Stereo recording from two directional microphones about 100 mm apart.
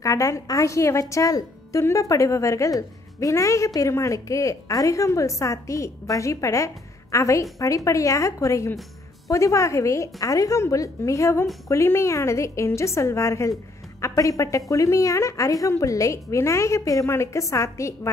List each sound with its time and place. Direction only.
0.0 s a woman's voice: 35° left (ahead or behind)